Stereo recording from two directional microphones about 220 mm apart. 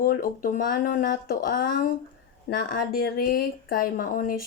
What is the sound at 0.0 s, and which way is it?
Speech, 40° left (ahead or behind).